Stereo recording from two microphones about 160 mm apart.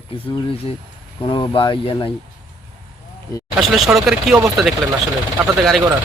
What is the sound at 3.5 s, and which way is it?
Speech, centre (ahead or behind).